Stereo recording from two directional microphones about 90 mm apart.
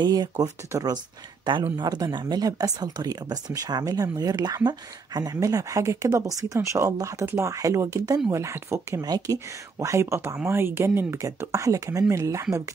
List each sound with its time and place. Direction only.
0.0 s speech: 45° right (ahead or behind)
0.7 s speech: 35° right (ahead or behind)
1.4 s speech: 60° right (ahead or behind); by 9.0 s 30° right (ahead or behind)
9.0 s speech: 45° right (ahead or behind)